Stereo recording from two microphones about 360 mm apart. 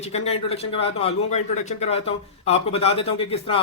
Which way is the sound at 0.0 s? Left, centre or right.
Centre.